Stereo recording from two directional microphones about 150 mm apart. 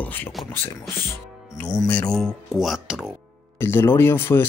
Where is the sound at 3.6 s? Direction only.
15° left (ahead or behind).